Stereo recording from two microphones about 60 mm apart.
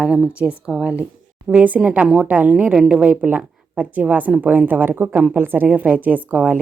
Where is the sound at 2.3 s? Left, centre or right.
Right.